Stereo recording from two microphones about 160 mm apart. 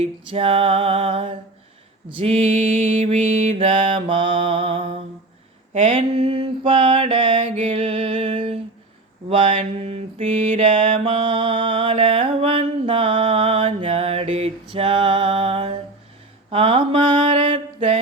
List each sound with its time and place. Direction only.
0.0 s mantra: 35° right (ahead or behind)
7.5 s music: 40° right (ahead or behind)
9.3 s mantra: 35° right (ahead or behind); by 10.7 s 50° right (ahead or behind)
10.8 s mantra: 35° right (ahead or behind)